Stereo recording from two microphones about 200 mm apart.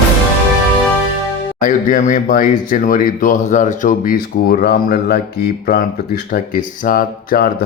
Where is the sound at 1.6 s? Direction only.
40° left (ahead or behind).